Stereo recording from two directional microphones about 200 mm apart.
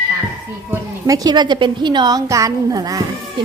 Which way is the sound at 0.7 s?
15° right (ahead or behind).